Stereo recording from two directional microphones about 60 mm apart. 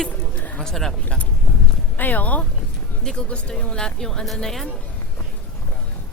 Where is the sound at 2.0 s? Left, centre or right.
Left.